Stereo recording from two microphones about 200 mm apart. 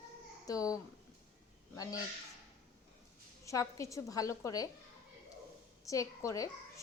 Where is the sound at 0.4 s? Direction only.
15° left (ahead or behind).